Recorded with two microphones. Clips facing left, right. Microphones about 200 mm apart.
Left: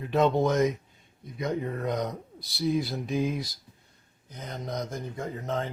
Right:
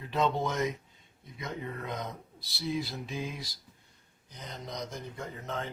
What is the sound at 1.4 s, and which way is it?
Speech, 40° left (ahead or behind).